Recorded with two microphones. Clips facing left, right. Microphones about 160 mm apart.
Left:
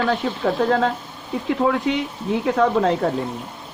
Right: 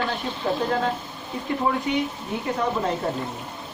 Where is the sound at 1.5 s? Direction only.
90° left.